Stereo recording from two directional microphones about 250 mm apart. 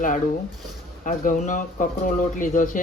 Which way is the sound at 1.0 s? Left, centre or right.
Left.